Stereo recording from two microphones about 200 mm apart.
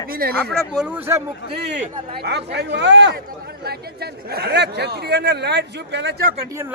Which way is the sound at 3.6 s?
50° right (ahead or behind).